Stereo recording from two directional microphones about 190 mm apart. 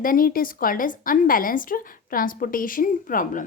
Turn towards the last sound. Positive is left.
turn(degrees=45)  # may be behind; listen again after turning